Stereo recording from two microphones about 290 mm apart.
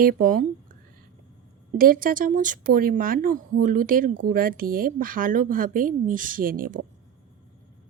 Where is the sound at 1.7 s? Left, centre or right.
Right.